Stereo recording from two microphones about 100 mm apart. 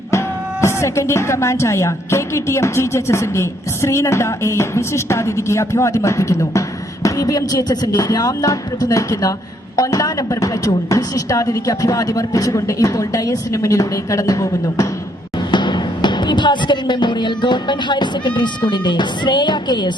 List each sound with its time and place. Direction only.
0.6 s a woman's voice: 30° left (ahead or behind)
15.5 s music: 50° left (ahead or behind)